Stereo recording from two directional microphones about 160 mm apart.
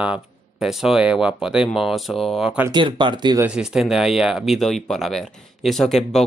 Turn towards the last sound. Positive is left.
turn(degrees=0)  # may be behind; listen again after turning